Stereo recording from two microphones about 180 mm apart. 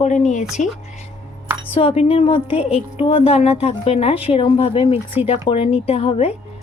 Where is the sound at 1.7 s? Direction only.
30° left (ahead or behind).